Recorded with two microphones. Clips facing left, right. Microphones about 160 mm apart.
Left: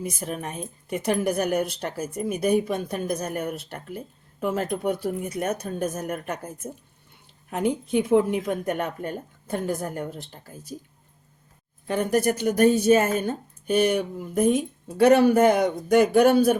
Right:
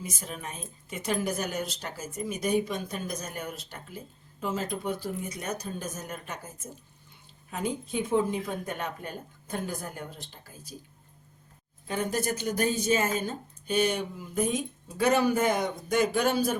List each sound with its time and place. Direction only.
0.0 s speech: 60° left (ahead or behind)
11.9 s speech: 60° left (ahead or behind)